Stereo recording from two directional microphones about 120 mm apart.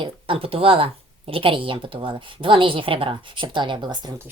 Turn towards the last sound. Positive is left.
turn(degrees=-35)  # may be behind; listen again after turning